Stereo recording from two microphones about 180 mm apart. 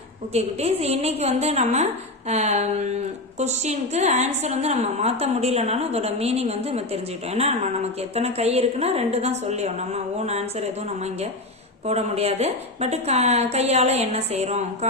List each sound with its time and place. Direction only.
0.3 s a woman's voice: 35° right (ahead or behind)